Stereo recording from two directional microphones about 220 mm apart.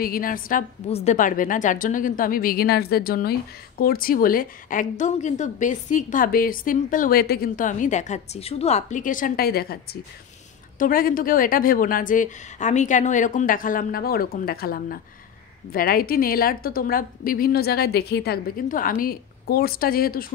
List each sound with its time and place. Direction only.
0.0 s a woman's voice: 40° left (ahead or behind)
10.8 s a woman's voice: 40° left (ahead or behind)